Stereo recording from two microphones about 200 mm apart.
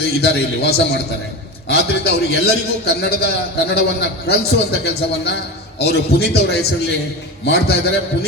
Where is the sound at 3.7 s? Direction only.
55° left (ahead or behind).